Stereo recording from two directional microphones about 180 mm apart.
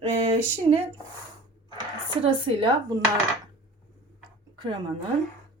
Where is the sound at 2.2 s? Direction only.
30° right (ahead or behind).